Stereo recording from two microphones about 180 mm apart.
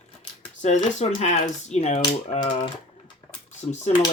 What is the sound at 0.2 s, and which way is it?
Speech, 40° left (ahead or behind).